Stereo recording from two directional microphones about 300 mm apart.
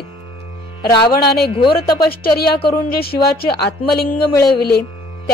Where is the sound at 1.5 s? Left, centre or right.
Centre.